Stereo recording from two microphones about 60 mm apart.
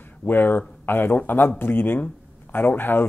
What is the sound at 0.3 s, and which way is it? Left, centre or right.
Speech, left.